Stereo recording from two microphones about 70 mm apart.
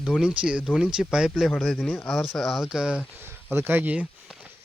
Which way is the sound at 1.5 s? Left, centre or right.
Centre.